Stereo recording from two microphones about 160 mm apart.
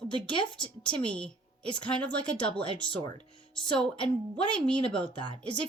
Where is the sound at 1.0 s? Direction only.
5° left (ahead or behind).